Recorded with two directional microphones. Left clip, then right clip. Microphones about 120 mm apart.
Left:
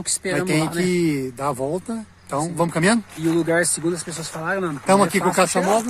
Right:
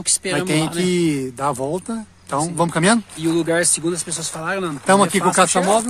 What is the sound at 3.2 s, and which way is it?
Speech, 10° left (ahead or behind).